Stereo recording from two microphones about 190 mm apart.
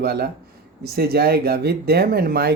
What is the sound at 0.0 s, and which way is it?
Speech, 55° right (ahead or behind).